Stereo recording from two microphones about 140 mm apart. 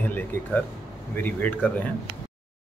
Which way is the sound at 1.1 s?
10° left (ahead or behind).